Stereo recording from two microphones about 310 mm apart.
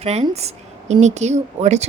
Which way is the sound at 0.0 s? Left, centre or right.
Centre.